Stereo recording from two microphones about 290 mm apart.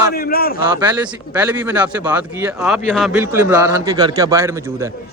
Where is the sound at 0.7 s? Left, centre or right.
Centre.